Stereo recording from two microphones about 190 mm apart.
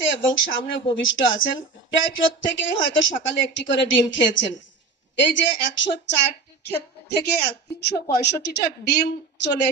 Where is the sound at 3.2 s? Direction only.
75° left (ahead or behind).